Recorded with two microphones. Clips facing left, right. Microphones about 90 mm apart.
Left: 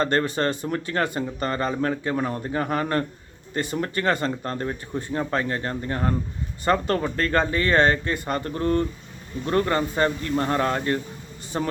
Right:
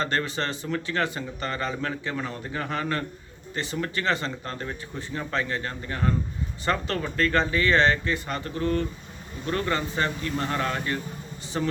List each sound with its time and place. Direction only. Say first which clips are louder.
0.0 s speech: left 5 dB; 45° left (ahead or behind)